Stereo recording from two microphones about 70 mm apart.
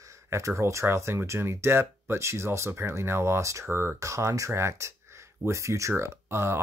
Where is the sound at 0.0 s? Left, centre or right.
Right.